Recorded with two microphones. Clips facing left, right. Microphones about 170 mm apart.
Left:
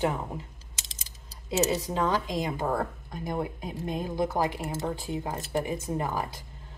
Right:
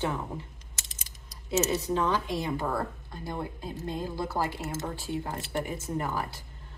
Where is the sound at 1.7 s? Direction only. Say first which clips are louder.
Even; 15° left (ahead or behind).